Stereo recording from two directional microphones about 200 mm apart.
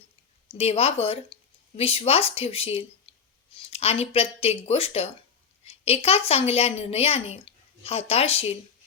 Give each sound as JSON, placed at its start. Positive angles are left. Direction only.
{"t": 0.5, "sound": "speech", "side_deg": 30}
{"t": 3.1, "sound": "clicking", "side_deg": 25}
{"t": 3.5, "sound": "a woman's voice", "side_deg": 30}